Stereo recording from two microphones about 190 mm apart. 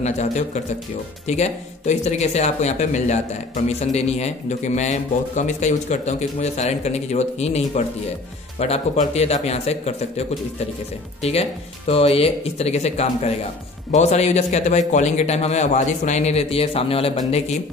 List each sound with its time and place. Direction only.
0.0 s a man's voice: 35° left (ahead or behind)
11.9 s a man's voice: 30° left (ahead or behind)